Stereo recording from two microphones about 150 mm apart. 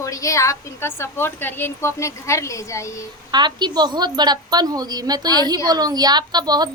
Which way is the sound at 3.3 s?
30° right (ahead or behind).